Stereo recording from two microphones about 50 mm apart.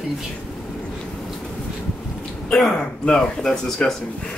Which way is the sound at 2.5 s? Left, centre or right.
Centre.